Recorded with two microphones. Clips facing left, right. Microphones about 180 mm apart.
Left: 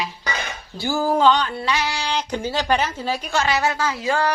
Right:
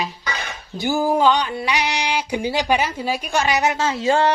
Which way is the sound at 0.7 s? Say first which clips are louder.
Right 2 dB; 15° right (ahead or behind).